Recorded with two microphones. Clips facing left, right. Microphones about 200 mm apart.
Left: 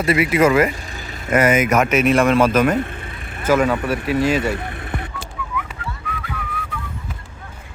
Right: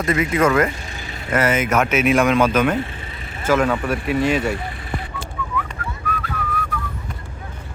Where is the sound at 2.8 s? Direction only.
55° left (ahead or behind).